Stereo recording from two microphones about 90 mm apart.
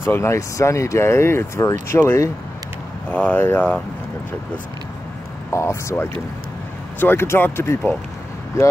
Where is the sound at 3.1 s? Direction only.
15° left (ahead or behind).